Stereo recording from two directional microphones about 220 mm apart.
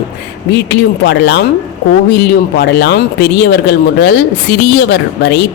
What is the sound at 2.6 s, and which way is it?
Speech, 50° left (ahead or behind).